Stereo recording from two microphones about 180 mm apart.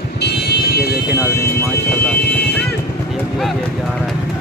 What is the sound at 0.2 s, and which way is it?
Music, 65° left (ahead or behind).